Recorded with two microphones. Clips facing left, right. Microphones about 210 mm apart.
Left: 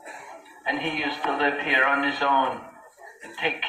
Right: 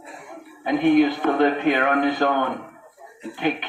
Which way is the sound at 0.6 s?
50° right (ahead or behind).